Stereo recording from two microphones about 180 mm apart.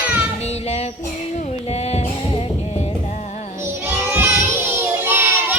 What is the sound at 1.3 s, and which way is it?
Music, 35° left (ahead or behind).